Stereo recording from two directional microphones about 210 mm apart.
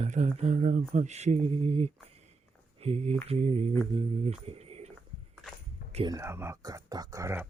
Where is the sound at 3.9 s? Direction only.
25° right (ahead or behind).